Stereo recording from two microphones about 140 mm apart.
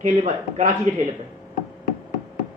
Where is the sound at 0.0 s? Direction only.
60° right (ahead or behind).